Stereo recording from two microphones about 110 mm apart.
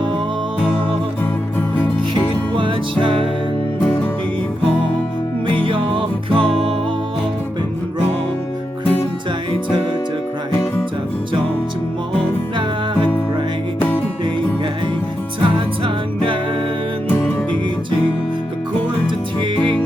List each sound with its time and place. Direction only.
2.6 s music: 50° right (ahead or behind)
5.6 s music: 50° right (ahead or behind)
15.4 s music: 50° right (ahead or behind)